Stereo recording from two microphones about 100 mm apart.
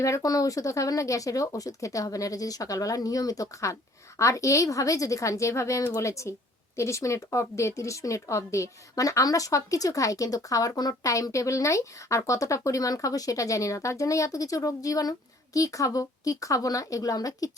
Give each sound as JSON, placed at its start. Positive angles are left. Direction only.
{"t": 0.0, "sound": "speech", "side_deg": 35}